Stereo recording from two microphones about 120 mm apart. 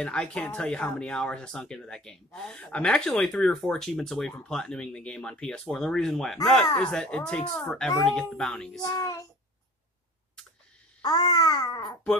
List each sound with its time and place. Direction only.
0.0 s speech: 10° left (ahead or behind)
8.9 s a child's voice: 25° left (ahead or behind)
11.0 s babbling: 35° left (ahead or behind)